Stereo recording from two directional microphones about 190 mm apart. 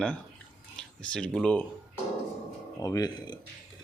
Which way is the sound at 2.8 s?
20° left (ahead or behind).